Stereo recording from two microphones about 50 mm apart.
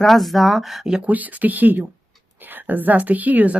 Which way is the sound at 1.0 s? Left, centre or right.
Right.